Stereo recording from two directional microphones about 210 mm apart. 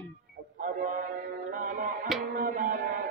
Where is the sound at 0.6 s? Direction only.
40° right (ahead or behind).